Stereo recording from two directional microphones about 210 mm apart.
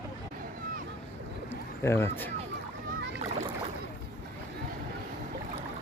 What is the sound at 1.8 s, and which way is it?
Speech, 10° left (ahead or behind).